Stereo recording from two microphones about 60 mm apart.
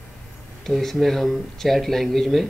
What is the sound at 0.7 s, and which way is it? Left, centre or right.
Speech, centre.